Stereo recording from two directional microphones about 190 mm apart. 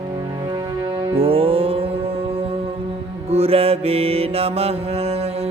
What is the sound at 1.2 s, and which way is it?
Music, 30° right (ahead or behind).